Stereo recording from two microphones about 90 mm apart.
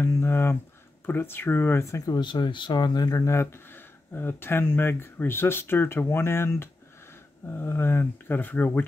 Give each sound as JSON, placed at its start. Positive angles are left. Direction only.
{"t": 0.0, "sound": "a sound", "side_deg": 25}
{"t": 1.0, "sound": "speech", "side_deg": 25}
{"t": 2.1, "sound": "speech", "side_deg": 55}
{"t": 3.2, "sound": "speech", "side_deg": 30}